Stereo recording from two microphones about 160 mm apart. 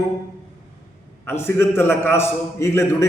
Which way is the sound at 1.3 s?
15° left (ahead or behind).